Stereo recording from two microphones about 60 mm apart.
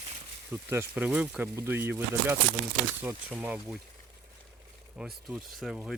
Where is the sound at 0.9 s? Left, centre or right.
Right.